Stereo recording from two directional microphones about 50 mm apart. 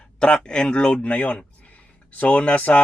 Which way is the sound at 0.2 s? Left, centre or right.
Left.